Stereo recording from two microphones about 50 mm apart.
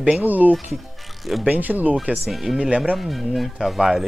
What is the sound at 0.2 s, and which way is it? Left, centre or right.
Speech, right.